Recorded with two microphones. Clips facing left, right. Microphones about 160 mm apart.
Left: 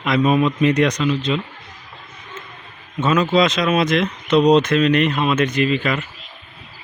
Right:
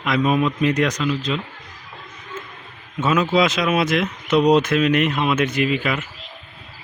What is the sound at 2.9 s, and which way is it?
Speech, 5° right (ahead or behind).